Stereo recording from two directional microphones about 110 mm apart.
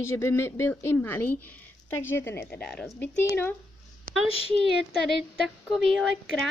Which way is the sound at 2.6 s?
5° left (ahead or behind).